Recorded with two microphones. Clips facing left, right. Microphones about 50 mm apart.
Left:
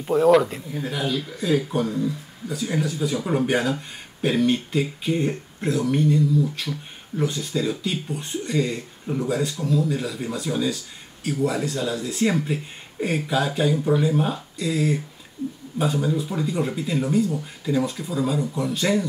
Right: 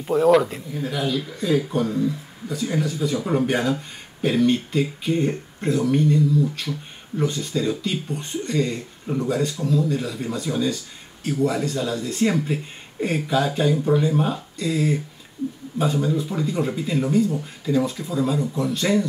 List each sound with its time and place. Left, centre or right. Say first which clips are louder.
0.0 s speech: even; centre